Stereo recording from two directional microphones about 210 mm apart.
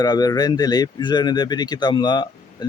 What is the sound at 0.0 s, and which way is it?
Speech, 20° left (ahead or behind).